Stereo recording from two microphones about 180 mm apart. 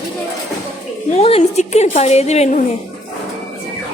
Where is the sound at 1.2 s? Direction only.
35° left (ahead or behind).